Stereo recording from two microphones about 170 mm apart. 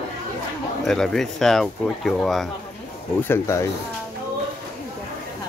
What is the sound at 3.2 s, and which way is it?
Speech, 15° left (ahead or behind).